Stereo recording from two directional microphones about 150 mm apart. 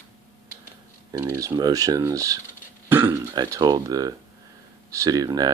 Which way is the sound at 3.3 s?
25° right (ahead or behind).